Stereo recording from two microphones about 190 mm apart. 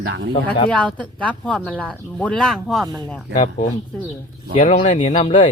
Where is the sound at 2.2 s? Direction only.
5° left (ahead or behind).